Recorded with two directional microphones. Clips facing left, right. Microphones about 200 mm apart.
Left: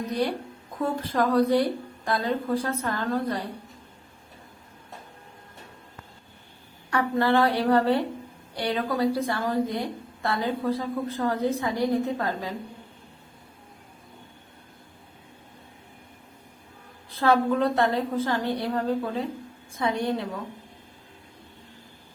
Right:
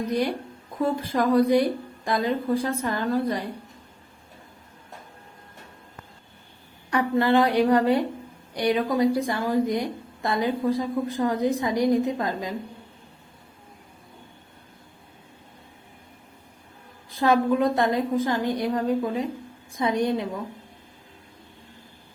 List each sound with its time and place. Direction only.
0.8 s a woman's voice: 10° right (ahead or behind)
6.9 s a woman's voice: 15° right (ahead or behind)
17.1 s a woman's voice: 15° right (ahead or behind)